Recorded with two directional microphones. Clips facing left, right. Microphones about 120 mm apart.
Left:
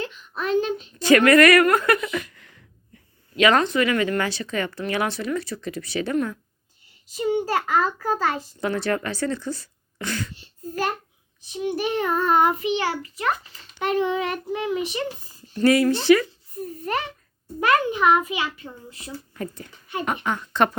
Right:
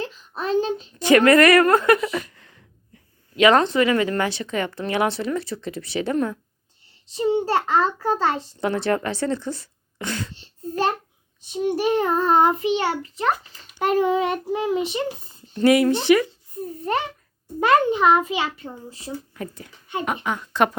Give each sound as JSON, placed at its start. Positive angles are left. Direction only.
{"t": 0.0, "sound": "a sound", "side_deg": -35}
{"t": 0.9, "sound": "a woman's voice", "side_deg": -20}
{"t": 15.5, "sound": "speech", "side_deg": -20}
{"t": 16.8, "sound": "a child's voice", "side_deg": -30}
{"t": 19.3, "sound": "speech", "side_deg": -5}